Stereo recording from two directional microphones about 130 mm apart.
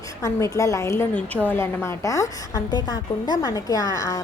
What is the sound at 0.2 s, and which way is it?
A woman's voice, 25° left (ahead or behind).